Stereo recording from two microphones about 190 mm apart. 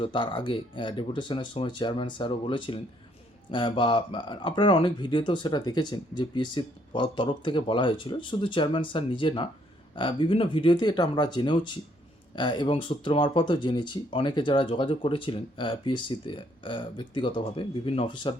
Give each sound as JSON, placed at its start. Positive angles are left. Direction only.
{"t": 0.0, "sound": "speech", "side_deg": 25}